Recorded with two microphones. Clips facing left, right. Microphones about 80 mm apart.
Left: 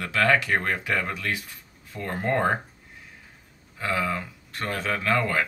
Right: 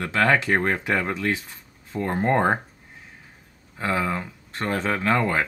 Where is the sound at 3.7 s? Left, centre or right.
Right.